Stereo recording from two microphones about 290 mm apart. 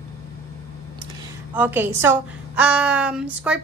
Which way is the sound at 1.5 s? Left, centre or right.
Centre.